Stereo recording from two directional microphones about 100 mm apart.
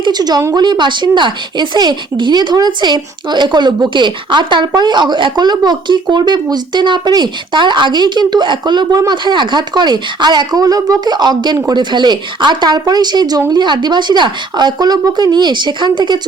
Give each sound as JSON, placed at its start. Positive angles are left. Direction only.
{"t": 0.0, "sound": "speech", "side_deg": -45}